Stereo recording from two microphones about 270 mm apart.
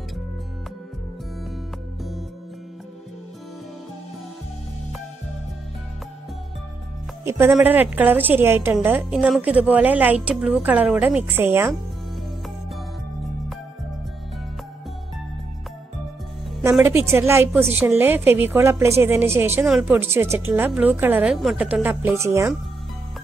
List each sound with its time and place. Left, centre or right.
7.2 s a woman's voice: centre
16.6 s a woman's voice: centre